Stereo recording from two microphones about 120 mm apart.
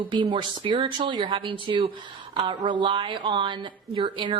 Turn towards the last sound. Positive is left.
turn(degrees=-40)  # may be behind; listen again after turning